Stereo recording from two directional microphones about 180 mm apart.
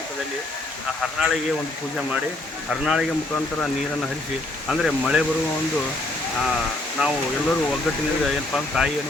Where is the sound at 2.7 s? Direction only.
5° right (ahead or behind).